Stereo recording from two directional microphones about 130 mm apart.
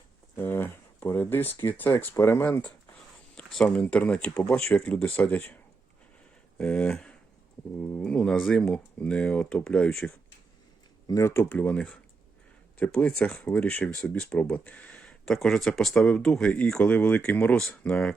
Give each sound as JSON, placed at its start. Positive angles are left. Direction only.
{"t": 0.3, "sound": "speech", "side_deg": 15}
{"t": 6.6, "sound": "speech", "side_deg": 10}
{"t": 11.1, "sound": "speech", "side_deg": 20}